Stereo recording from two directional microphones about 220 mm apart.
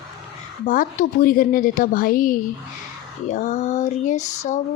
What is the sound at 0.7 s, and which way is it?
A woman's voice, 40° left (ahead or behind).